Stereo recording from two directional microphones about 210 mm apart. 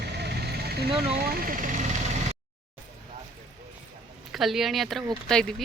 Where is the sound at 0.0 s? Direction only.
50° right (ahead or behind).